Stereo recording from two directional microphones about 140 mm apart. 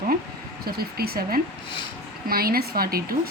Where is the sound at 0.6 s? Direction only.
90° right.